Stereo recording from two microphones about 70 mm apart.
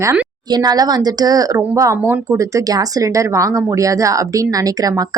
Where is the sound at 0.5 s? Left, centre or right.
Right.